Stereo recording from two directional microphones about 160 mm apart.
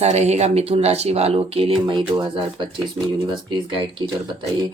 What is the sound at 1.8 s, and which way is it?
Speech, 25° right (ahead or behind).